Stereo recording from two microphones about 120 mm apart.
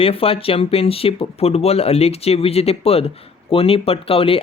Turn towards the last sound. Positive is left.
turn(degrees=50)  # may be behind; listen again after turning